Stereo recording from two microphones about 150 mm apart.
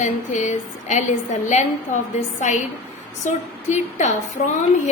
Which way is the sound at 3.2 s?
55° left (ahead or behind).